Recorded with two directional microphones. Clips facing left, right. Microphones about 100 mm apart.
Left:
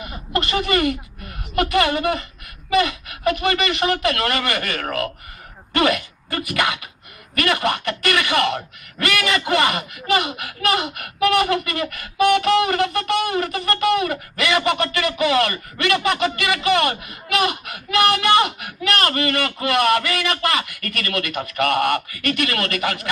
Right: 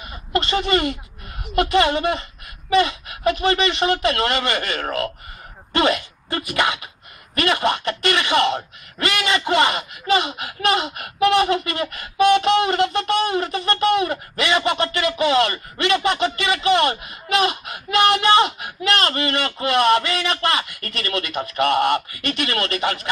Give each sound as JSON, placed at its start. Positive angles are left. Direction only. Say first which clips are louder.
{"t": 0.4, "sound": "speech", "louder": "even", "side_deg": -25}